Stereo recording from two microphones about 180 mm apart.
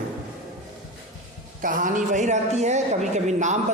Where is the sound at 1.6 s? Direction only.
50° right (ahead or behind).